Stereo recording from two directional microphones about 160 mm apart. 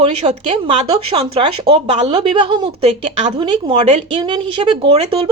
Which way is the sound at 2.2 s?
25° right (ahead or behind).